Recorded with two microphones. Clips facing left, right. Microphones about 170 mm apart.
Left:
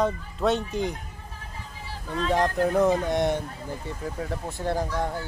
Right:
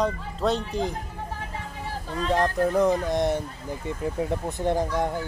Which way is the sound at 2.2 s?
Centre (ahead or behind).